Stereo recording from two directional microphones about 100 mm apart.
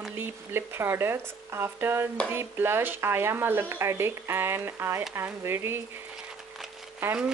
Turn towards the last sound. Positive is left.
turn(degrees=-20)  # may be behind; listen again after turning